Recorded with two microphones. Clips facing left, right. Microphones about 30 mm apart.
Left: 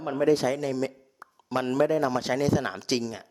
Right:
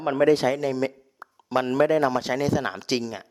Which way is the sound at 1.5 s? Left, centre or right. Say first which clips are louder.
Right 3 dB; centre.